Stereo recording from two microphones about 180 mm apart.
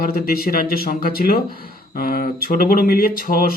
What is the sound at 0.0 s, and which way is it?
Speech, 55° left (ahead or behind).